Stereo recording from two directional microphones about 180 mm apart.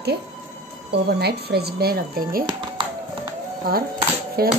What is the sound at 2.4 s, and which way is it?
Music, 25° right (ahead or behind).